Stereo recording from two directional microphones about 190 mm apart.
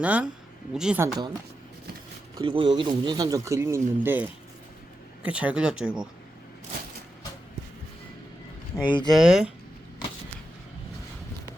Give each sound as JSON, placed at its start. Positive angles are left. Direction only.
{"t": 0.0, "sound": "speech", "side_deg": -5}
{"t": 1.0, "sound": "speech", "side_deg": -20}
{"t": 2.4, "sound": "speech", "side_deg": -25}
{"t": 8.7, "sound": "speech", "side_deg": 15}
{"t": 9.1, "sound": "speech", "side_deg": -5}